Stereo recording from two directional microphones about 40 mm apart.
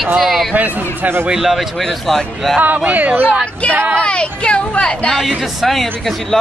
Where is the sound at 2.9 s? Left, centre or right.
Right.